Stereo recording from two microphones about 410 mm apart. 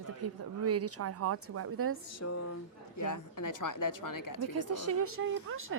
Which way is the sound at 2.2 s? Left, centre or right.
Left.